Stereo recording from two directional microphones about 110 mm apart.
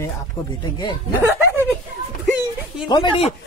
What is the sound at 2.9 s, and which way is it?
Speech, 45° left (ahead or behind).